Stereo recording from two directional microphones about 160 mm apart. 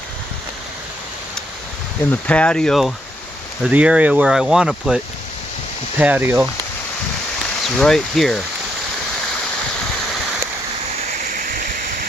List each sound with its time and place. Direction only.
2.0 s speech: 10° left (ahead or behind)
6.0 s speech: 10° right (ahead or behind)
7.8 s speech: 5° left (ahead or behind)
11.3 s a sound: 60° right (ahead or behind)